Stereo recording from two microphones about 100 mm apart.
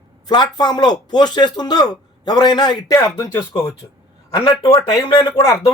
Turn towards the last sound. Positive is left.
turn(degrees=30)  # may be behind; listen again after turning